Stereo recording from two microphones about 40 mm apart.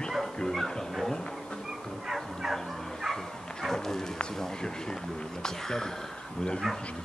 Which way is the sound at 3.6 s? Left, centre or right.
Centre.